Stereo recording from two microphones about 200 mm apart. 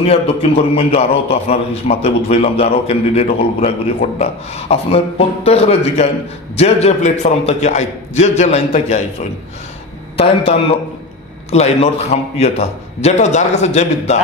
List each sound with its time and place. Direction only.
0.0 s a man's voice: 30° left (ahead or behind)
11.5 s a man's voice: 30° left (ahead or behind)